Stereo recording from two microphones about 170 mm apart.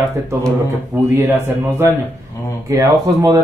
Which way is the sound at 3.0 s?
20° right (ahead or behind).